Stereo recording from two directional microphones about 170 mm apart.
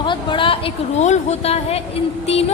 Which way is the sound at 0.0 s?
30° left (ahead or behind).